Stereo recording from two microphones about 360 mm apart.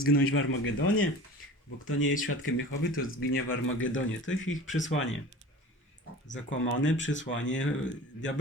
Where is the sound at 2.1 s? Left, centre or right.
Left.